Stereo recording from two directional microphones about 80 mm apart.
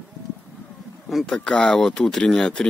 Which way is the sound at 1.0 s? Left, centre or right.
Centre.